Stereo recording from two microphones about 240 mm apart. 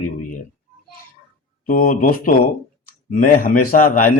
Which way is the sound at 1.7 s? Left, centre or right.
Left.